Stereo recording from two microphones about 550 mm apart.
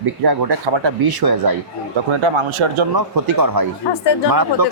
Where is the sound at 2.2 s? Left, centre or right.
Right.